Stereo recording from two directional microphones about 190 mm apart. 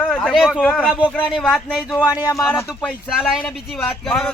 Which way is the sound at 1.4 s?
5° left (ahead or behind).